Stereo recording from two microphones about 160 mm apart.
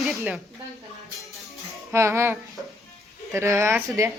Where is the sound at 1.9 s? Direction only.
15° right (ahead or behind).